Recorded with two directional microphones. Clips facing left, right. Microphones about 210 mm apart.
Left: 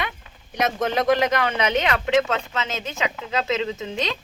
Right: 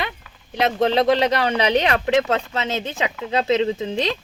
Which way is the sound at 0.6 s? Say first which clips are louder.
Right 4 dB; 30° right (ahead or behind).